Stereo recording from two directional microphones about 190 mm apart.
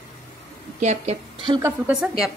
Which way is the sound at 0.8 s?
35° right (ahead or behind).